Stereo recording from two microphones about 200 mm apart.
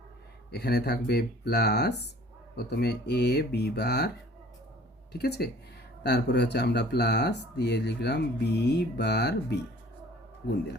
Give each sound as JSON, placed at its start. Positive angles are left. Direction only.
{"t": 0.5, "sound": "speech", "side_deg": 55}
{"t": 5.1, "sound": "speech", "side_deg": 55}